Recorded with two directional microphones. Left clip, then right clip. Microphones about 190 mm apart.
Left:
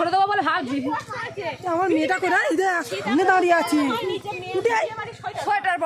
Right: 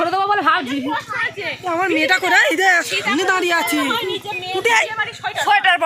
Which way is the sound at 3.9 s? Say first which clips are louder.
Right 4 dB; 15° left (ahead or behind).